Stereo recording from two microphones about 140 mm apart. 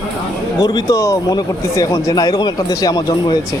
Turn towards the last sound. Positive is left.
turn(degrees=30)  # may be behind; listen again after turning